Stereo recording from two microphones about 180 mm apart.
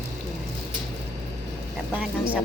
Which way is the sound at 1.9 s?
10° right (ahead or behind).